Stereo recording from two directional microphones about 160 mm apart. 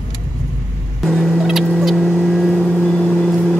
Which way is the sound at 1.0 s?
Centre (ahead or behind).